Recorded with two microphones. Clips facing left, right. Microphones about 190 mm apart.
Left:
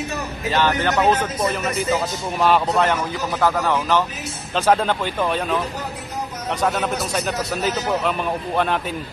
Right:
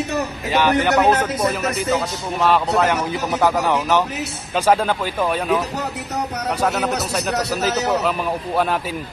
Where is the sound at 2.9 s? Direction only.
15° right (ahead or behind).